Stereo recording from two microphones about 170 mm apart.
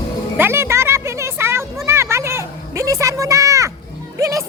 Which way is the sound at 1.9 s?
15° right (ahead or behind).